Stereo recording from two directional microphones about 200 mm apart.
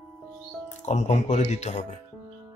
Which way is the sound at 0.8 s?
35° left (ahead or behind).